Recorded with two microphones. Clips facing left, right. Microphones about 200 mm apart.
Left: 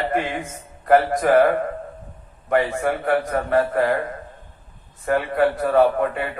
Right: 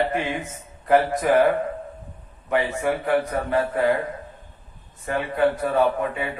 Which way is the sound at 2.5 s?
50° left (ahead or behind).